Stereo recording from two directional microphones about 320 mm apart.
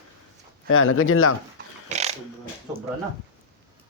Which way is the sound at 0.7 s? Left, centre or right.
Left.